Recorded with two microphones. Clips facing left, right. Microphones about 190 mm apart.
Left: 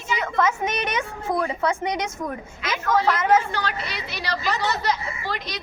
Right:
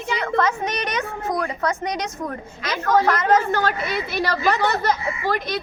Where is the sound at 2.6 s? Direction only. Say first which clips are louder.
Right 3 dB; 50° right (ahead or behind).